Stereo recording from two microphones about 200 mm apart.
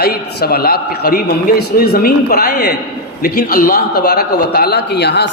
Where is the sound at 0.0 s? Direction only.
50° left (ahead or behind).